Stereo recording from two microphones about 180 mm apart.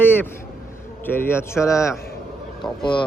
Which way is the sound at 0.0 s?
10° left (ahead or behind).